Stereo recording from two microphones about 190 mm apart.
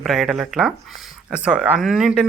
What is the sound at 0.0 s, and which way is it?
Speech, centre (ahead or behind).